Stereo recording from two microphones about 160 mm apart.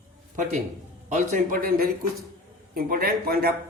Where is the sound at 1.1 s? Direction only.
55° right (ahead or behind).